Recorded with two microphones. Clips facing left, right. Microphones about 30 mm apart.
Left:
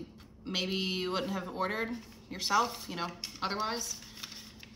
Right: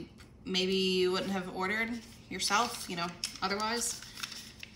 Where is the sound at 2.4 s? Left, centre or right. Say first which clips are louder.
Left 1 dB; right.